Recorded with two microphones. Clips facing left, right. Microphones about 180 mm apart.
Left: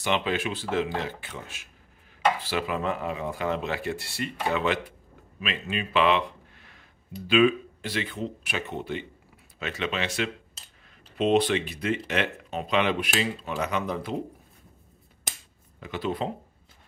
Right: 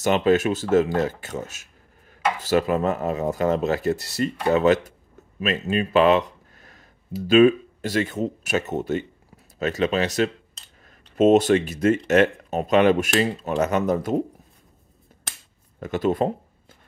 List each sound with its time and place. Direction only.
0.0 s speech: 45° right (ahead or behind)
10.5 s a sound: 5° left (ahead or behind)
11.1 s speech: 45° right (ahead or behind)
15.8 s speech: 45° right (ahead or behind)